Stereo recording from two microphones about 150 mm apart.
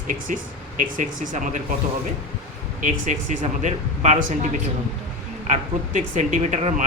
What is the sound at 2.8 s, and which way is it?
Speech, 55° right (ahead or behind).